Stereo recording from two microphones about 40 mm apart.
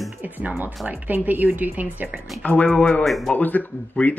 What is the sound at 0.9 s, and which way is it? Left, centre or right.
A woman's voice, right.